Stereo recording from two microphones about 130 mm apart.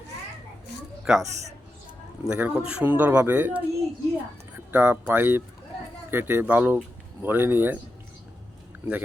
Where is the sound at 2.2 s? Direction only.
5° right (ahead or behind).